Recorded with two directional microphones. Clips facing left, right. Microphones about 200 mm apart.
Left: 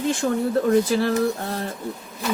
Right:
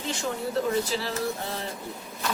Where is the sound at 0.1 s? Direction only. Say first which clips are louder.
Left 6 dB; 50° left (ahead or behind).